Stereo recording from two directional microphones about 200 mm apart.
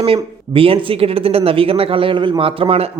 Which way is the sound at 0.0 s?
25° right (ahead or behind).